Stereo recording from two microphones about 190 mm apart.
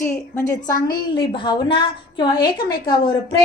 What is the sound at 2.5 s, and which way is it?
Speech, 50° left (ahead or behind).